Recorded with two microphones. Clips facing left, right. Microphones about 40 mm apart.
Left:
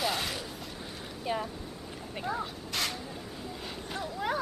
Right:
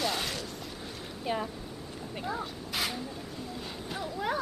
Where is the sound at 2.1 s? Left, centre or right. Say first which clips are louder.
Left 1 dB; centre.